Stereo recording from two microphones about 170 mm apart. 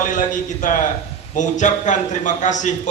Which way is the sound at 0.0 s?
50° left (ahead or behind).